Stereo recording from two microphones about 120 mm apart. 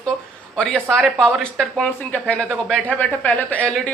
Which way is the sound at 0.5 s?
5° left (ahead or behind).